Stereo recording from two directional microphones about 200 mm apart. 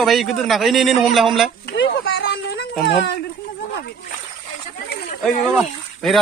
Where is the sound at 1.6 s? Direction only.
60° left (ahead or behind).